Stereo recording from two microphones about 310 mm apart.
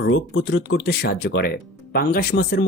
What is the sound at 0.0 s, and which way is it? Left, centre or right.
Speech, left.